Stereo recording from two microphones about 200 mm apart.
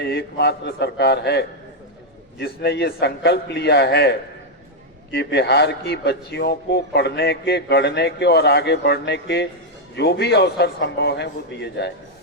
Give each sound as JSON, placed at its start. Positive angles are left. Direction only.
{"t": 0.0, "sound": "a man's voice", "side_deg": 55}